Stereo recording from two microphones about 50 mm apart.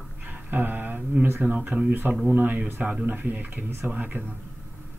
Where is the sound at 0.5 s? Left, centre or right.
Right.